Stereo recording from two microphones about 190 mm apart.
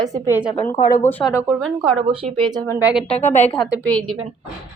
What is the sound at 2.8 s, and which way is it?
Speech, 10° right (ahead or behind).